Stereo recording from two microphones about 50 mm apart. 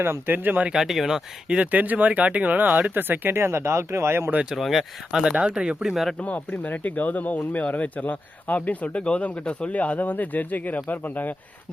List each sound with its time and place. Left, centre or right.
0.0 s speech: right
0.7 s speech: centre
1.5 s speech: right
4.5 s speech: centre
5.2 s speech: centre
5.8 s speech: centre
6.1 s speech: left